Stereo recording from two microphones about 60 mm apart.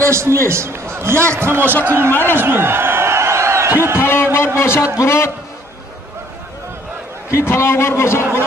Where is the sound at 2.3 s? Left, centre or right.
Right.